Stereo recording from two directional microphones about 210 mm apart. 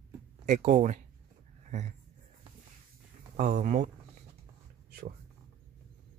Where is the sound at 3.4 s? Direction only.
35° right (ahead or behind).